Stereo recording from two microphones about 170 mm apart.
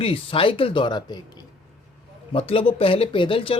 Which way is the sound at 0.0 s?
30° left (ahead or behind).